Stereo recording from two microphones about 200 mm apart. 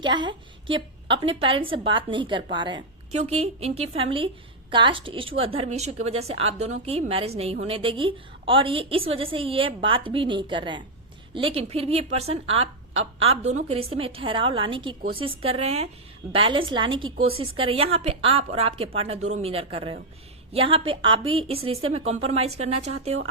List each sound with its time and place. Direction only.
0.0 s a woman's voice: 25° right (ahead or behind)